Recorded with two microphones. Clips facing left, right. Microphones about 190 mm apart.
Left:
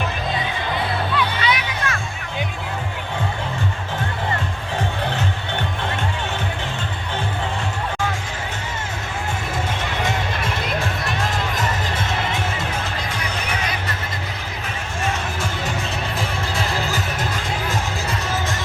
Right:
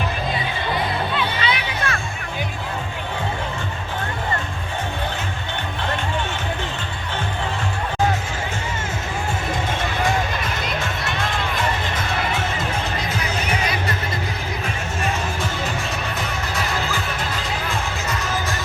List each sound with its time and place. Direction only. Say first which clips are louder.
1.1 s music: left 1 dB; 30° right (ahead or behind)